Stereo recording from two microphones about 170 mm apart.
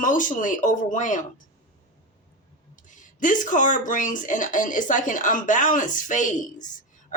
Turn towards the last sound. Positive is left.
turn(degrees=50)  # may be behind; listen again after turning